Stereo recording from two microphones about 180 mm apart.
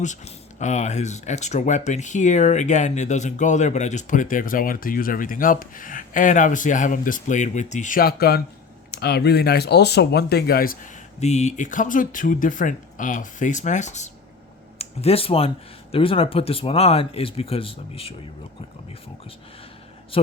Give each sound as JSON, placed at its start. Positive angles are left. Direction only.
{"t": 0.6, "sound": "speech", "side_deg": 40}
{"t": 11.2, "sound": "speech", "side_deg": 40}
{"t": 20.1, "sound": "speech", "side_deg": 30}